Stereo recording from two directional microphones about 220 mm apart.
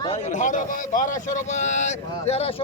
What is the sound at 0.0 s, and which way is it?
Speech, 30° left (ahead or behind).